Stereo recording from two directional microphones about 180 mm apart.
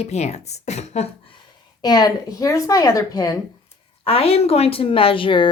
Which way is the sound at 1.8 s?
20° left (ahead or behind).